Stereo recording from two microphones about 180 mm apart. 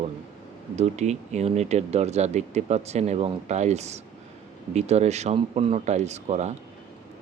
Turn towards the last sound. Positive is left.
turn(degrees=-40)  # may be behind; listen again after turning